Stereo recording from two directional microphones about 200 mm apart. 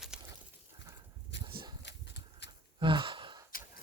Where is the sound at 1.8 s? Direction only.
60° left (ahead or behind).